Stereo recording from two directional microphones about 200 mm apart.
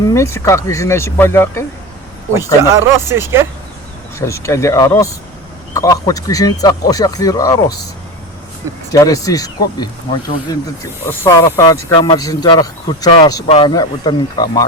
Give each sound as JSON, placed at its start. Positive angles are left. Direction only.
{"t": 0.0, "sound": "speech", "side_deg": 15}
{"t": 3.1, "sound": "speech", "side_deg": -10}
{"t": 4.2, "sound": "speech", "side_deg": 15}
{"t": 8.9, "sound": "speech", "side_deg": 15}